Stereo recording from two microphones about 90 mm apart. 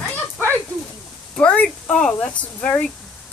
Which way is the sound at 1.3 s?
15° left (ahead or behind).